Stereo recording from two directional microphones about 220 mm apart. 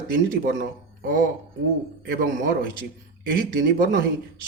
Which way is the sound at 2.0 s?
40° right (ahead or behind).